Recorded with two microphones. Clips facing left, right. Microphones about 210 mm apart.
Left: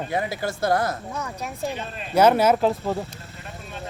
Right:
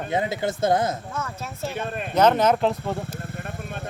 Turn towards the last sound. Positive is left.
turn(degrees=0)  # may be behind; listen again after turning